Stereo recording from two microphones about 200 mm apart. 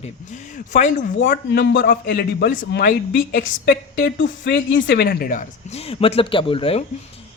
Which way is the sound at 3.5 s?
60° left (ahead or behind).